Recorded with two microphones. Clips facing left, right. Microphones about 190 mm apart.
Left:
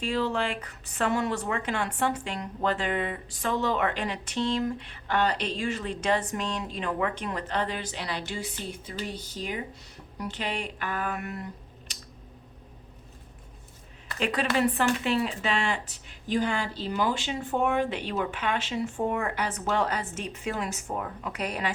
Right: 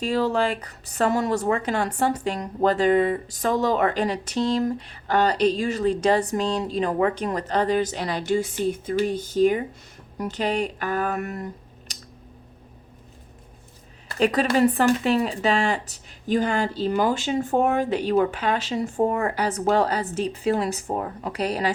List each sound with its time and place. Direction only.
0.0 s speech: 40° right (ahead or behind)
14.1 s speech: 40° right (ahead or behind)